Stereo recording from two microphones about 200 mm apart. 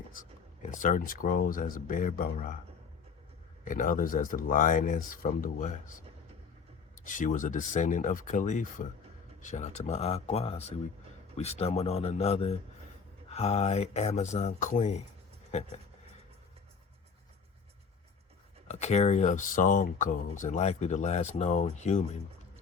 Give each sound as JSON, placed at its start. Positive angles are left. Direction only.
{"t": 0.1, "sound": "speech", "side_deg": 40}
{"t": 3.6, "sound": "speech", "side_deg": 40}
{"t": 7.0, "sound": "speech", "side_deg": 40}
{"t": 18.7, "sound": "speech", "side_deg": 35}